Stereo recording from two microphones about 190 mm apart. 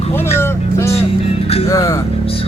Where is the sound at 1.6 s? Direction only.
15° left (ahead or behind).